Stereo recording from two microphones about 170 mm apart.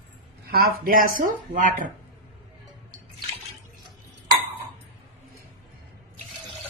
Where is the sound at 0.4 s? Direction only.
65° right (ahead or behind).